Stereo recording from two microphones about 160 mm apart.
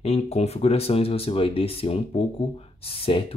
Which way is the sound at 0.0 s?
40° left (ahead or behind).